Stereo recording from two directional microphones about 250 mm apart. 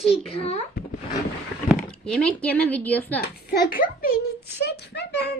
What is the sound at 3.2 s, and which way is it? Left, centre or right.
A child's voice, left.